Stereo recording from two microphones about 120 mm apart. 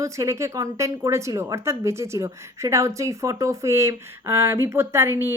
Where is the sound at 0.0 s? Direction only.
25° right (ahead or behind).